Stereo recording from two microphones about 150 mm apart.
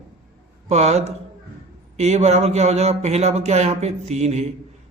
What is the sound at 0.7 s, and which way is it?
Speech, 45° right (ahead or behind).